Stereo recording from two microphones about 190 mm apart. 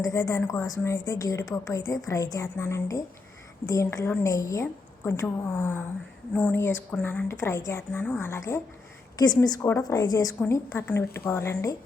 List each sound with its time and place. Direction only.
0.0 s a woman's voice: 15° left (ahead or behind)